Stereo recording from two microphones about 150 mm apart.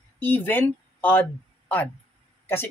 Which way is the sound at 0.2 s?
15° left (ahead or behind).